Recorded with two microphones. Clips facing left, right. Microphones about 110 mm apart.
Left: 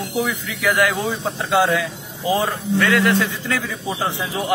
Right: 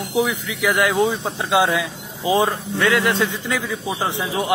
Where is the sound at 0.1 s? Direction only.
15° right (ahead or behind).